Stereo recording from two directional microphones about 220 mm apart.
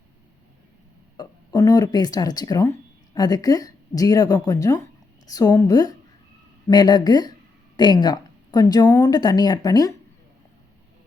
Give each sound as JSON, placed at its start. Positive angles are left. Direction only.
{"t": 1.1, "sound": "speech", "side_deg": 20}